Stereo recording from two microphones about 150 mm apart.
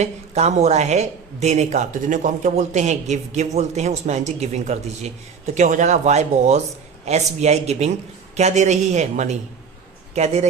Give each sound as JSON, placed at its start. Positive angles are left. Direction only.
{"t": 0.0, "sound": "speech", "side_deg": -45}